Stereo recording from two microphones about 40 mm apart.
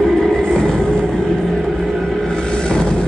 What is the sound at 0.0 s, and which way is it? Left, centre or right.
Vehicle, centre.